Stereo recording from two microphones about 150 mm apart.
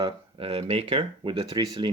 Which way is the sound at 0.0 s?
35° right (ahead or behind).